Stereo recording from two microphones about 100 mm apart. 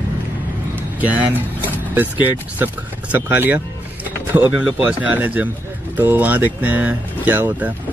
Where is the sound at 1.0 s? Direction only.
15° right (ahead or behind).